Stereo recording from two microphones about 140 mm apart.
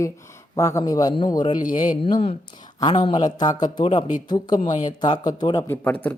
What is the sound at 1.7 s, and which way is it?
Speech, 65° left (ahead or behind).